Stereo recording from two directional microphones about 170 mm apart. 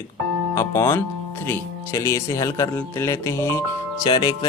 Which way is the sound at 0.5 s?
15° left (ahead or behind).